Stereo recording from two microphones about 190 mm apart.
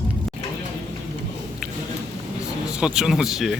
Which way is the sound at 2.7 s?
5° right (ahead or behind).